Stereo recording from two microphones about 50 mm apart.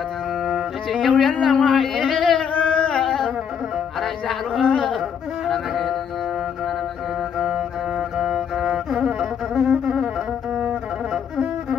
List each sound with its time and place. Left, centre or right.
0.9 s speech: centre
2.3 s carnatic music: left
4.0 s a sound: centre
5.5 s music: centre
7.3 s music: centre